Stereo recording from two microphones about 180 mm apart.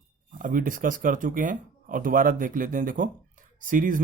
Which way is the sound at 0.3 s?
50° right (ahead or behind).